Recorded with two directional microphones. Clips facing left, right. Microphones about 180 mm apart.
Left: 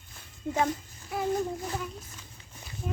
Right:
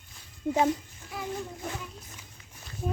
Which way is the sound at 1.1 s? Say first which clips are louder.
Left 7 dB; 45° left (ahead or behind).